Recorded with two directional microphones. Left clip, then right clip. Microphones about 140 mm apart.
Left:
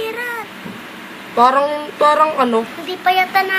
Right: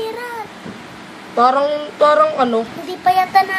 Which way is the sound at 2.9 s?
40° right (ahead or behind).